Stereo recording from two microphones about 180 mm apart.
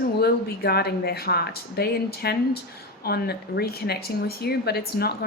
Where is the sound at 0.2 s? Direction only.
60° left (ahead or behind).